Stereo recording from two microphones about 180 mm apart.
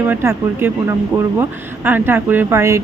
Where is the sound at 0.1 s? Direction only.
10° right (ahead or behind).